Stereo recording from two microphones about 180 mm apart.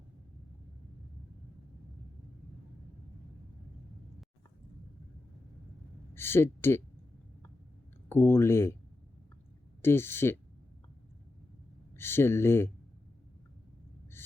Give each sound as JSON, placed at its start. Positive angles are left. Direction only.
{"t": 6.1, "sound": "speech", "side_deg": 15}
{"t": 8.1, "sound": "speech", "side_deg": 15}
{"t": 9.8, "sound": "speech", "side_deg": 15}
{"t": 11.9, "sound": "speech", "side_deg": 15}